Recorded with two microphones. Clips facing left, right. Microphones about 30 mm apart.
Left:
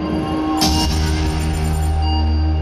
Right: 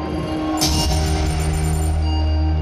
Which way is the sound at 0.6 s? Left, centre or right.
Centre.